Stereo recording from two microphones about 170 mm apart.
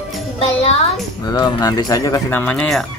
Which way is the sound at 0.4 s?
35° left (ahead or behind).